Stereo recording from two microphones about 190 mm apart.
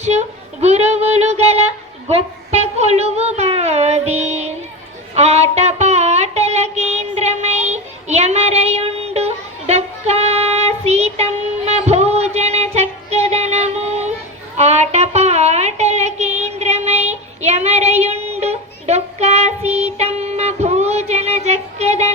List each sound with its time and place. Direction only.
0.6 s child singing: 35° right (ahead or behind)